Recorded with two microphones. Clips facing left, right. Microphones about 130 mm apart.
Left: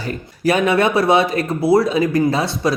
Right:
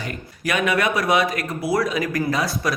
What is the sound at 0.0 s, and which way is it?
Speech, 30° left (ahead or behind).